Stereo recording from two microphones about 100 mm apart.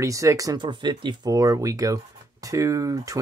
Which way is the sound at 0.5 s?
45° right (ahead or behind).